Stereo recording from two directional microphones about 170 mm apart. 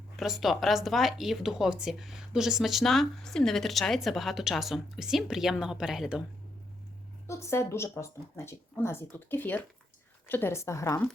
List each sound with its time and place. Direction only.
0.2 s speech: centre (ahead or behind)
7.3 s speech: 15° left (ahead or behind)